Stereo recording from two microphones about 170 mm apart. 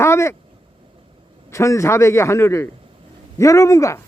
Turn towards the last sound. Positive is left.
turn(degrees=20)  # may be behind; listen again after turning